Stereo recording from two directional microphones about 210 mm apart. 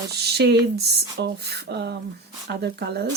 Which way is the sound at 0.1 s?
50° right (ahead or behind).